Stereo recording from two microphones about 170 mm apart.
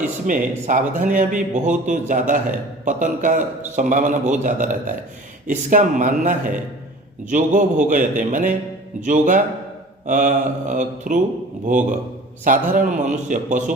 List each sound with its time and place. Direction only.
0.3 s a man's voice: 50° right (ahead or behind)